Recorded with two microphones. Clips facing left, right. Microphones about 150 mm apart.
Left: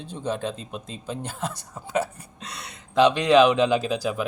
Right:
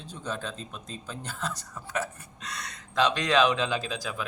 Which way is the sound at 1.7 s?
30° left (ahead or behind).